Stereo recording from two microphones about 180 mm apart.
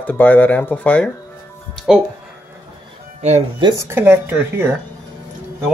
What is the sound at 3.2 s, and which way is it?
Speech, 40° right (ahead or behind).